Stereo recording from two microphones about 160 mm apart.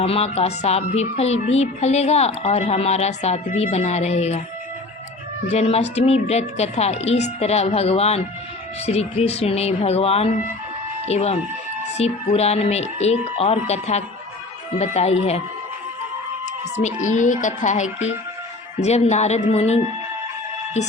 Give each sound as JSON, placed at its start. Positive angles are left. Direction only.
{"t": 0.0, "sound": "speech", "side_deg": 40}
{"t": 5.5, "sound": "a woman's voice", "side_deg": 40}
{"t": 16.7, "sound": "speech", "side_deg": 50}